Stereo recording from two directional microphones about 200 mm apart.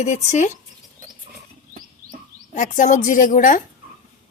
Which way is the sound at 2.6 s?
40° left (ahead or behind).